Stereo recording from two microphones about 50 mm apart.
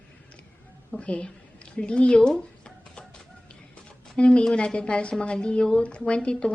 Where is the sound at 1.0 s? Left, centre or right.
Left.